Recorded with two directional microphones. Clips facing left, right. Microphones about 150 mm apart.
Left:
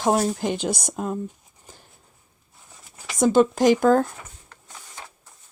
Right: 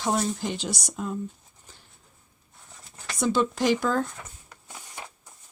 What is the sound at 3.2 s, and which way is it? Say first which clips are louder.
Speech: left 7 dB; 45° left (ahead or behind).